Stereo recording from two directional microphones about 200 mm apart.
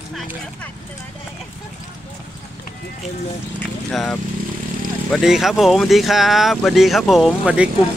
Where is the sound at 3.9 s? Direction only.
Centre (ahead or behind).